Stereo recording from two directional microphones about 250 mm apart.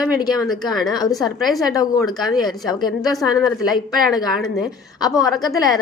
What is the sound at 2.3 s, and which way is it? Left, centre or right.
Speech, centre.